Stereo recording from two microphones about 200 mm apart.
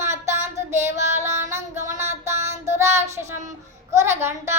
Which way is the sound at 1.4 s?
35° right (ahead or behind).